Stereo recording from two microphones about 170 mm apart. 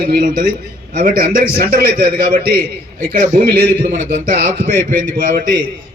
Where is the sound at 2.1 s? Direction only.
60° right (ahead or behind).